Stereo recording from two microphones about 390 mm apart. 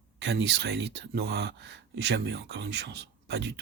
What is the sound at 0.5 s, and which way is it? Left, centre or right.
Speech, right.